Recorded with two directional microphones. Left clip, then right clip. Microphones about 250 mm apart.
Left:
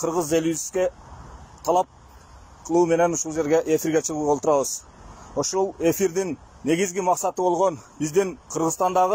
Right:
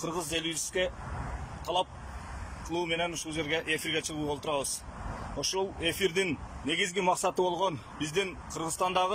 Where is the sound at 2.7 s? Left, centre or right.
Centre.